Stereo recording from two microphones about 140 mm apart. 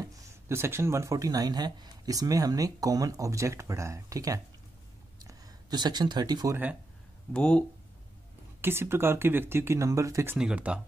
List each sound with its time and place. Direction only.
0.0 s speech: 25° right (ahead or behind)
5.2 s a sound: 30° right (ahead or behind)
6.5 s speech: 10° right (ahead or behind)
7.3 s speech: 10° left (ahead or behind)
8.5 s speech: 15° right (ahead or behind)
10.3 s speech: 10° right (ahead or behind)